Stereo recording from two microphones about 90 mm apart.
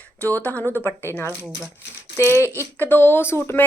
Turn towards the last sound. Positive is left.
turn(degrees=25)  # may be behind; listen again after turning